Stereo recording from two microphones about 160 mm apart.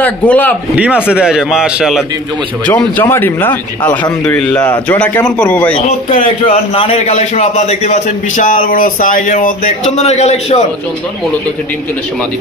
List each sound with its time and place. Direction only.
0.0 s speech: 10° left (ahead or behind)
1.1 s a man's voice: 5° right (ahead or behind)
2.6 s speech: 10° left (ahead or behind)
6.1 s a man's voice: 55° left (ahead or behind)
6.7 s a man's voice: 40° left (ahead or behind); by 9.5 s 55° left (ahead or behind)
9.9 s a man's voice: 45° left (ahead or behind)